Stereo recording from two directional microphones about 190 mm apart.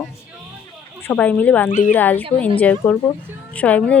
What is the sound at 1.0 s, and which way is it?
Speech, 5° left (ahead or behind).